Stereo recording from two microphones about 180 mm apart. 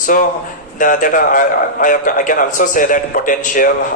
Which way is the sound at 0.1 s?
50° left (ahead or behind).